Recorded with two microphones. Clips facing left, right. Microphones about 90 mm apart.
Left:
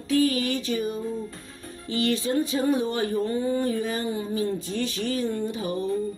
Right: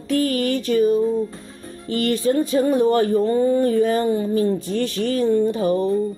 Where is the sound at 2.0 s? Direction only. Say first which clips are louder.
Right 5 dB; 50° right (ahead or behind).